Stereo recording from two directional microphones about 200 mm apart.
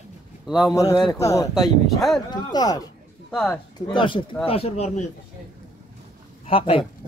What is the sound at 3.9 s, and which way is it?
A man's voice, 25° left (ahead or behind).